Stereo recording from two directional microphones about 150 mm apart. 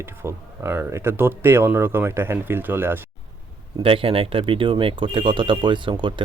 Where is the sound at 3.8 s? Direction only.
35° right (ahead or behind).